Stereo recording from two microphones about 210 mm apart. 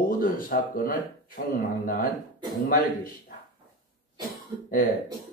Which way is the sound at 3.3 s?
45° left (ahead or behind).